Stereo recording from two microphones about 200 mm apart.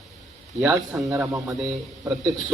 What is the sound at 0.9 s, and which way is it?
Speech, 5° right (ahead or behind).